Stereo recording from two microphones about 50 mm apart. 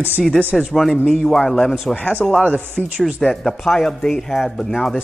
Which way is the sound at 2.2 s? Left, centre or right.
Centre.